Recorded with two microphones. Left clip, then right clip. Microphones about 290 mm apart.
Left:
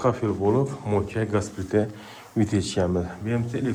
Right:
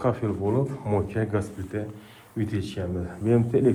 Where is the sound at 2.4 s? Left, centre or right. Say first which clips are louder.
Left 6 dB; centre.